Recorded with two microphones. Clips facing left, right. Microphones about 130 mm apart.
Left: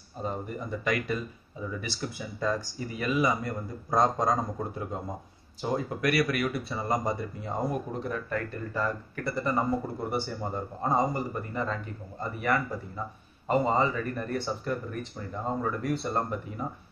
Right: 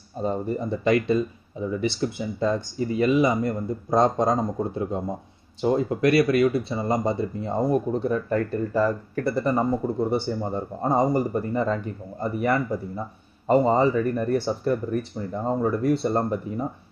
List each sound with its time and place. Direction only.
0.2 s speech: 35° right (ahead or behind)
9.5 s speech: 25° right (ahead or behind)